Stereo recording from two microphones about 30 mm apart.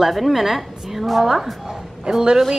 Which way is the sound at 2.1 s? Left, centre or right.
Right.